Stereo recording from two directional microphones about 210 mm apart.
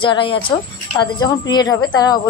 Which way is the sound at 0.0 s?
25° left (ahead or behind).